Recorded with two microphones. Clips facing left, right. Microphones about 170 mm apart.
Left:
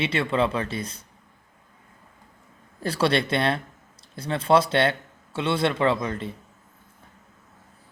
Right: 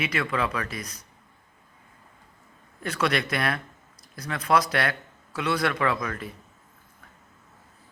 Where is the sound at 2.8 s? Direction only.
30° left (ahead or behind).